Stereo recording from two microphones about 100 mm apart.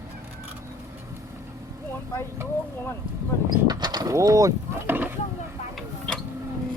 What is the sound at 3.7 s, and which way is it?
Mechanisms, 45° right (ahead or behind).